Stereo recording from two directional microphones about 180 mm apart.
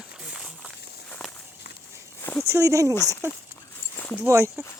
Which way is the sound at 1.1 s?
5° left (ahead or behind).